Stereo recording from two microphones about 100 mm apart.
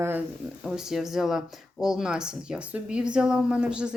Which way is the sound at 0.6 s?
5° right (ahead or behind).